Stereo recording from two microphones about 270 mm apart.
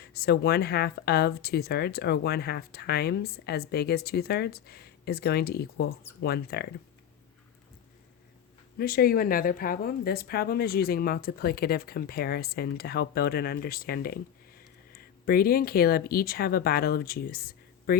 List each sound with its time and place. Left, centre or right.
0.0 s a woman's voice: left
8.8 s a woman's voice: left